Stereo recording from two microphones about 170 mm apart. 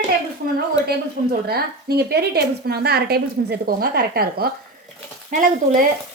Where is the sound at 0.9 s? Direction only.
70° right (ahead or behind).